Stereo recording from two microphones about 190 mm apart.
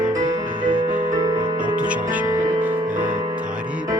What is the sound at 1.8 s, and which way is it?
Music, 5° right (ahead or behind).